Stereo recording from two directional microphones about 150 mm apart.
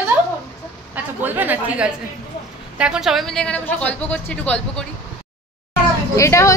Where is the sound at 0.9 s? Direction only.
10° right (ahead or behind); by 4.8 s 10° left (ahead or behind).